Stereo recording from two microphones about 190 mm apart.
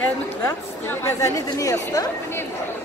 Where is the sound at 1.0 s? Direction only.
15° left (ahead or behind).